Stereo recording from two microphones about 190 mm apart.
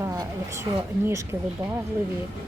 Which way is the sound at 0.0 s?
20° right (ahead or behind).